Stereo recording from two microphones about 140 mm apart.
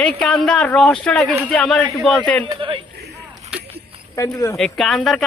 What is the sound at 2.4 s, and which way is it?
Speech, 35° right (ahead or behind).